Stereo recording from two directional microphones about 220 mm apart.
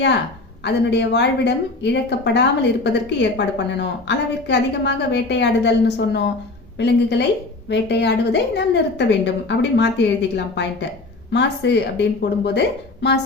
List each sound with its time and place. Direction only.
0.6 s a woman's voice: 50° left (ahead or behind)